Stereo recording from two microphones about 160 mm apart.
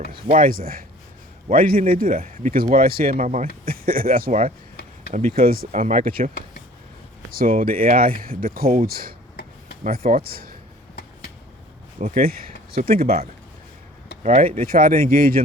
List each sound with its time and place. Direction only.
0.1 s speech: 60° right (ahead or behind)
7.3 s speech: 65° right (ahead or behind)
9.3 s a sound: 75° left (ahead or behind)
9.8 s speech: 60° right (ahead or behind)
11.9 s speech: 55° right (ahead or behind)
14.3 s speech: 50° right (ahead or behind)